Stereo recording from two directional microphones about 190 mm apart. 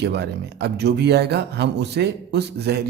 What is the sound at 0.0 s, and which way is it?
Speech, 60° right (ahead or behind).